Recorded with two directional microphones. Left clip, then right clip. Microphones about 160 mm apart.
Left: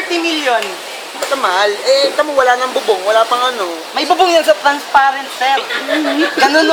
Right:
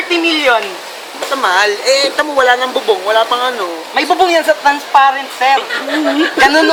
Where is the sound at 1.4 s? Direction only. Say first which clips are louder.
Right 2 dB; 15° right (ahead or behind).